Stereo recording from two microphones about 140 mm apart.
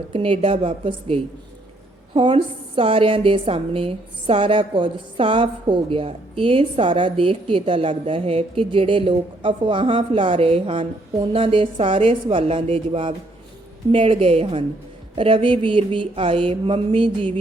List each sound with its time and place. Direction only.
0.1 s a woman's voice: 40° right (ahead or behind)